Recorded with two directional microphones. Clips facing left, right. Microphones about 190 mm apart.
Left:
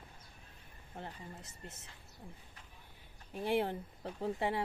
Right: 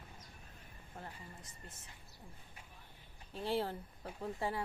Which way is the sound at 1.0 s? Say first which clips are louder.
Left 4 dB; 25° left (ahead or behind).